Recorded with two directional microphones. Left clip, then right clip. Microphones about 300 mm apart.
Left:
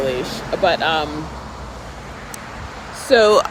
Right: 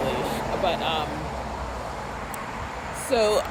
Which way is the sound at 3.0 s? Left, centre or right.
Left.